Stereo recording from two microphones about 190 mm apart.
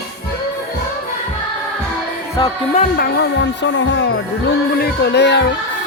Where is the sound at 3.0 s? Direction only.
60° left (ahead or behind).